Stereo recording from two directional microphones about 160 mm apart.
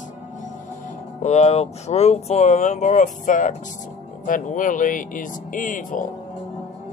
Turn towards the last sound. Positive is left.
turn(degrees=55)  # may be behind; listen again after turning